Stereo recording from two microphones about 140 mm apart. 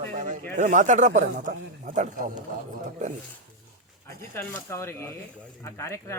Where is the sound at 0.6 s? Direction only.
60° right (ahead or behind).